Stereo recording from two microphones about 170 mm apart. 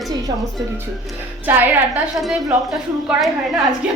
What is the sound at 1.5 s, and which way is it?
Speech, 10° right (ahead or behind).